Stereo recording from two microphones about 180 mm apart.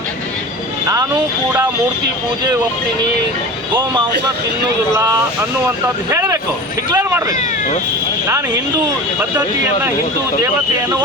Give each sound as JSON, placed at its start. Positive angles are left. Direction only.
{"t": 0.9, "sound": "speech", "side_deg": -20}
{"t": 6.1, "sound": "speech", "side_deg": -15}